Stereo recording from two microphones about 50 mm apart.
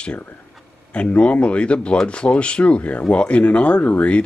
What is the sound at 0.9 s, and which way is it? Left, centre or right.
Speech, left.